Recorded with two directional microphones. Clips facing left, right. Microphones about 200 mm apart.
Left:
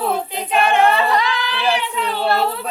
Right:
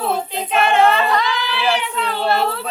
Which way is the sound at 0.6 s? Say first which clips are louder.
Right 1 dB; 15° left (ahead or behind).